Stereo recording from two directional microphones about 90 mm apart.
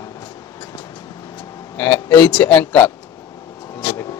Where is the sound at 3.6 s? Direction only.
35° left (ahead or behind).